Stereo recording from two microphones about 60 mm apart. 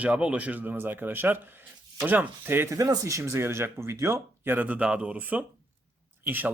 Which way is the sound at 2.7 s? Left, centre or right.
Right.